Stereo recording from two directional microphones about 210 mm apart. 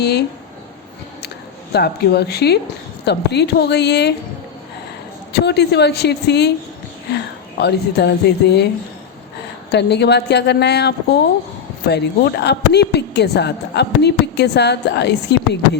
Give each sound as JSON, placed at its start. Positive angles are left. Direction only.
{"t": 0.0, "sound": "a woman's voice", "side_deg": 50}
{"t": 1.7, "sound": "a woman's voice", "side_deg": 50}
{"t": 5.3, "sound": "a woman's voice", "side_deg": 55}
{"t": 9.7, "sound": "a woman's voice", "side_deg": 55}